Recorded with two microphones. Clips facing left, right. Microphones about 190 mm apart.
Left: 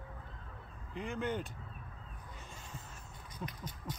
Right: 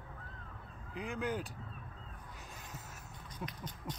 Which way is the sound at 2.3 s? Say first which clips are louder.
Left 1 dB; centre (ahead or behind).